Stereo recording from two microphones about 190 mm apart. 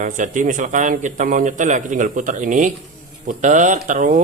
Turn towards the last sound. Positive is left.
turn(degrees=-40)  # may be behind; listen again after turning